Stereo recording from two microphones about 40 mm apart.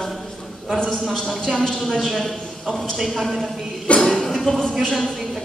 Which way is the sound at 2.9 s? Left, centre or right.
Centre.